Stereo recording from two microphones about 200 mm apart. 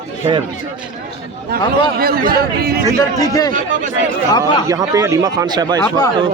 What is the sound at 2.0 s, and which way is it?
Speech, 50° right (ahead or behind).